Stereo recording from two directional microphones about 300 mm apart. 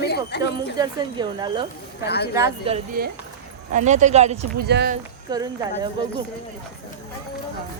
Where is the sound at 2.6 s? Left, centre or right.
Right.